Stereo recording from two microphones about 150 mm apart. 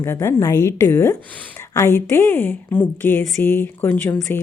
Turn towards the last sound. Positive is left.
turn(degrees=15)  # may be behind; listen again after turning